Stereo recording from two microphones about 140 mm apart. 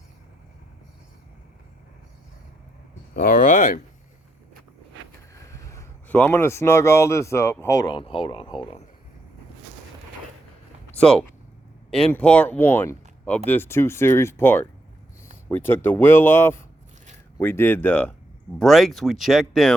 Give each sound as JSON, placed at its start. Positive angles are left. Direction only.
{"t": 3.2, "sound": "speech", "side_deg": 75}
{"t": 5.3, "sound": "a sound", "side_deg": 25}
{"t": 6.1, "sound": "speech", "side_deg": 15}
{"t": 7.9, "sound": "speech", "side_deg": 40}
{"t": 11.9, "sound": "speech", "side_deg": 5}